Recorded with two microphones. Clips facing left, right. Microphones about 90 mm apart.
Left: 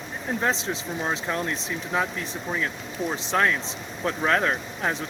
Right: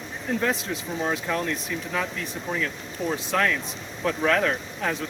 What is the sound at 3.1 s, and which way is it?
Speech, 20° left (ahead or behind).